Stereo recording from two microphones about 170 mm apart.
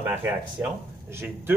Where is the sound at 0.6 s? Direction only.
15° right (ahead or behind).